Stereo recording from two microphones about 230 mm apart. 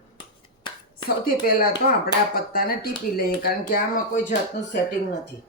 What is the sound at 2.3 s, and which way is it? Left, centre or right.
Speech, left.